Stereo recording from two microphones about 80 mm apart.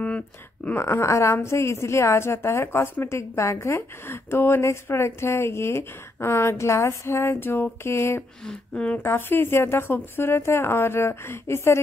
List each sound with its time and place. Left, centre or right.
0.7 s a woman's voice: left
8.5 s speech: centre
9.0 s a woman's voice: left